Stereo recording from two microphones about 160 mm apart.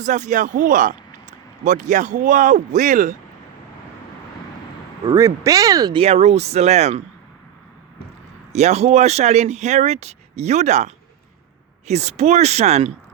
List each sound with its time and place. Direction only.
0.0 s speech: 50° right (ahead or behind)
5.0 s speech: 20° right (ahead or behind)
6.0 s speech: 40° right (ahead or behind)
8.5 s speech: 45° right (ahead or behind)